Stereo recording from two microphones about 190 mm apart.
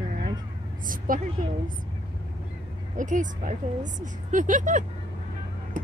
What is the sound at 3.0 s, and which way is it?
A woman's voice, 40° right (ahead or behind).